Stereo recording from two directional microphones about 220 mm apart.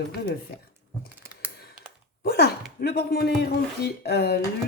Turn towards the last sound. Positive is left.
turn(degrees=45)  # may be behind; listen again after turning